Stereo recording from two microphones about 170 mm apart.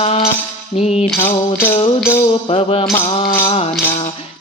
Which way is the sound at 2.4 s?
30° left (ahead or behind).